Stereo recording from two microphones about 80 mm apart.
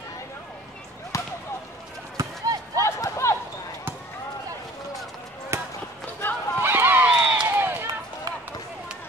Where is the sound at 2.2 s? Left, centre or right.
Right.